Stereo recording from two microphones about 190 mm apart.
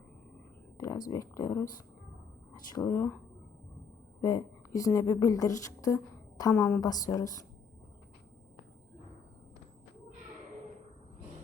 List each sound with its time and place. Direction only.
0.8 s a sound: 15° left (ahead or behind)
1.1 s speech: 15° left (ahead or behind)
2.6 s speech: 15° left (ahead or behind)
4.2 s a woman's voice: 15° left (ahead or behind)